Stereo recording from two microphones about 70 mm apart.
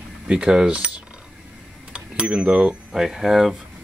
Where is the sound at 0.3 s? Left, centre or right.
Centre.